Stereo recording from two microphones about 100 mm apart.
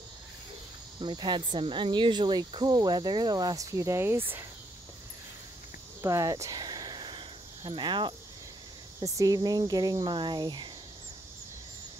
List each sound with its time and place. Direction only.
0.9 s speech: 50° right (ahead or behind); by 4.5 s 25° right (ahead or behind)
6.0 s a sound: 35° right (ahead or behind); by 8.1 s 50° right (ahead or behind)
9.0 s speech: 35° right (ahead or behind)